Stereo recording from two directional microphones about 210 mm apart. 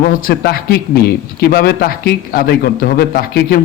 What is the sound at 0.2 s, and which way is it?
Speech, 45° left (ahead or behind).